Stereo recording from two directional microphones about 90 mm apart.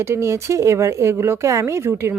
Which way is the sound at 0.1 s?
30° right (ahead or behind).